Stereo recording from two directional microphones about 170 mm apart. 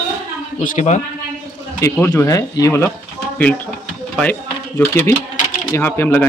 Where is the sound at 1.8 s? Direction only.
15° left (ahead or behind).